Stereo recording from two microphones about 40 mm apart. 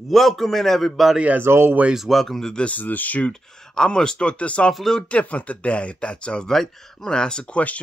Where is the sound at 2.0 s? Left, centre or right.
Centre.